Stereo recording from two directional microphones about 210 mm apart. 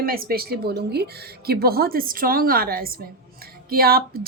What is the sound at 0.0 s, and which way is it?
A woman's voice, 45° right (ahead or behind).